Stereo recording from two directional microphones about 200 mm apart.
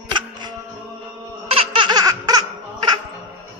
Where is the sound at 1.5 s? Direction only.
25° right (ahead or behind).